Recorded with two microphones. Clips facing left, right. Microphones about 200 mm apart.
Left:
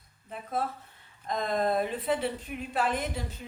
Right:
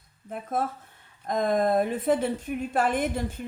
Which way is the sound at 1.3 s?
50° right (ahead or behind).